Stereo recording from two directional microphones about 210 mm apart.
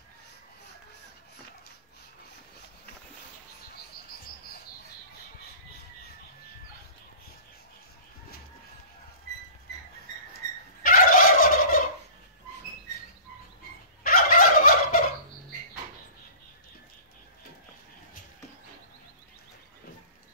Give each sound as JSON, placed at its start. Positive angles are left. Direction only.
{"t": 10.8, "sound": "fowl", "side_deg": 40}
{"t": 14.0, "sound": "fowl", "side_deg": 40}